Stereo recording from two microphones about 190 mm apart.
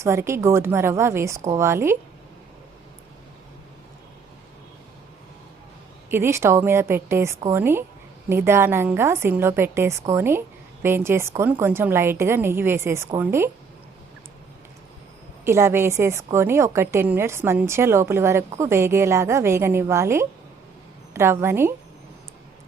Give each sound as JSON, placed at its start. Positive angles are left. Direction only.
{"t": 0.0, "sound": "a woman's voice", "side_deg": -15}
{"t": 6.1, "sound": "a woman's voice", "side_deg": -15}
{"t": 15.4, "sound": "a woman's voice", "side_deg": -15}